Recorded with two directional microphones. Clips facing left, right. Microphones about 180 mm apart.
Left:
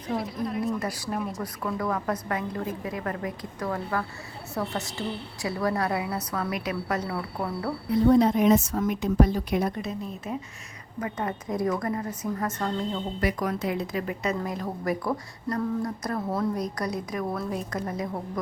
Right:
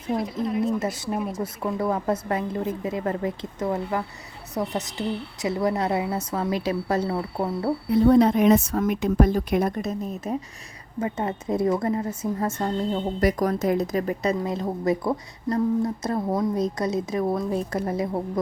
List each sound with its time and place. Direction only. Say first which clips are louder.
0.6 s a woman's voice: right 4 dB; 25° right (ahead or behind)
1.1 s speech: right 1 dB; 5° right (ahead or behind)
1.4 s a woman's voice: right 4 dB; 25° right (ahead or behind)
8.2 s a woman's voice: right 3 dB; 65° right (ahead or behind); by 10.3 s 45° right (ahead or behind)
11.0 s a woman's voice: right 4 dB; 25° right (ahead or behind)
13.1 s a woman's voice: right 6 dB; 40° right (ahead or behind)
14.4 s a woman's voice: right 5 dB; 25° right (ahead or behind)